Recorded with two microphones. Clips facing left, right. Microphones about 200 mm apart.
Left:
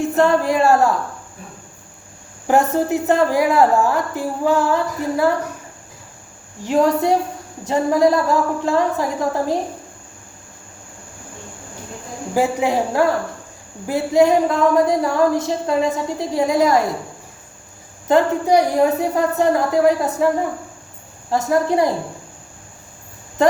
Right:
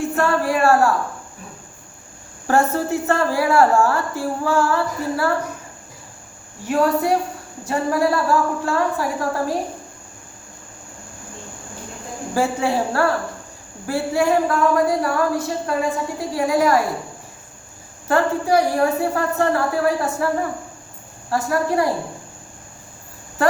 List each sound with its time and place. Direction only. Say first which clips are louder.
0.0 s speech: left 4 dB; 20° left (ahead or behind)
2.5 s a woman's voice: left 2 dB; 15° left (ahead or behind)
6.7 s speech: left 2 dB; 20° left (ahead or behind)
12.3 s a woman's voice: left 2 dB; 15° left (ahead or behind)
18.1 s a woman's voice: left 3 dB; 20° left (ahead or behind)